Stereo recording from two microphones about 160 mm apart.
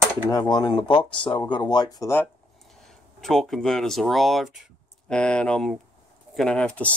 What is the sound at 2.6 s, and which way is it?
Speech, centre (ahead or behind).